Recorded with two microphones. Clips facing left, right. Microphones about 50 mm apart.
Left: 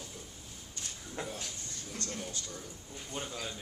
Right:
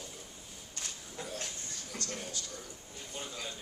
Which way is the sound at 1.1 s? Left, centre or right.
Left.